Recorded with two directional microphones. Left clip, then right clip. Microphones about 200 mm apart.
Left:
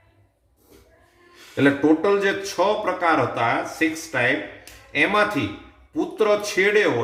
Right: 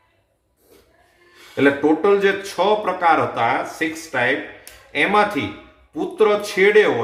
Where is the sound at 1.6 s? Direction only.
10° right (ahead or behind).